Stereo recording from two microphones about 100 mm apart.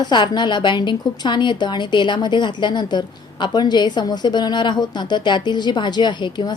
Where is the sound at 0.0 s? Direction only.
50° left (ahead or behind).